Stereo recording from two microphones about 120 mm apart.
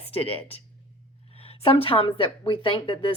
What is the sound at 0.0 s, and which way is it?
A woman's voice, 55° left (ahead or behind).